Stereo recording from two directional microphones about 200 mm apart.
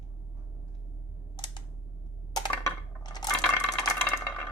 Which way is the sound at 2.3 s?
20° left (ahead or behind).